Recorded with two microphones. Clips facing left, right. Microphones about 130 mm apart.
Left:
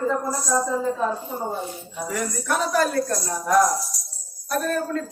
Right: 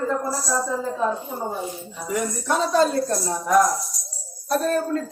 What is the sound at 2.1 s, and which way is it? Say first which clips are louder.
Speech: right 2 dB; 20° right (ahead or behind).